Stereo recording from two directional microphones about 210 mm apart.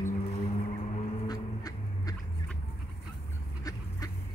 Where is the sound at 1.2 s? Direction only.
20° left (ahead or behind).